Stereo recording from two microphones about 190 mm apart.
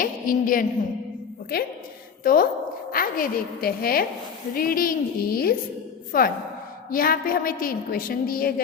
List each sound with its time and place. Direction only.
0.0 s a woman's voice: 45° left (ahead or behind)